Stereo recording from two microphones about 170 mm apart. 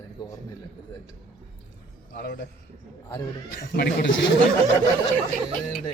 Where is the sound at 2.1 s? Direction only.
65° left (ahead or behind).